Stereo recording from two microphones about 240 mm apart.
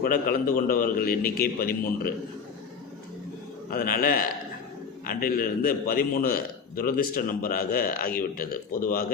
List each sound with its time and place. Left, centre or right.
0.0 s a man's voice: left
3.7 s a man's voice: left